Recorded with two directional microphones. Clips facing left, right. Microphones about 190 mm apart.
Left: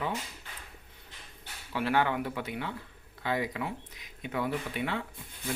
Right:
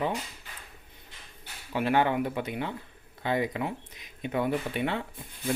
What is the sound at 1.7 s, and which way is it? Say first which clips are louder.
Speech: right 3 dB; 20° right (ahead or behind).